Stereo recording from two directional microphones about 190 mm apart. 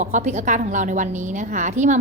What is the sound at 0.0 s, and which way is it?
A woman's voice, 40° right (ahead or behind).